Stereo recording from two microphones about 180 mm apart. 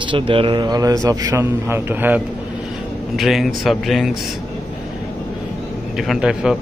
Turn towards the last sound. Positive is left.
turn(degrees=-5)  # may be behind; listen again after turning